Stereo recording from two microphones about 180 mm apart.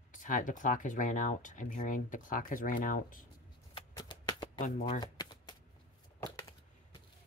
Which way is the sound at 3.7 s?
25° left (ahead or behind).